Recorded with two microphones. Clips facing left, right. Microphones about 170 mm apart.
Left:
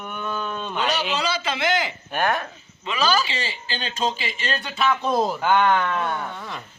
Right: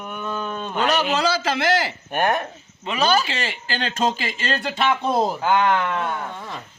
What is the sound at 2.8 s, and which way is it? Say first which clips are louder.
Speech: right 2 dB; 55° right (ahead or behind).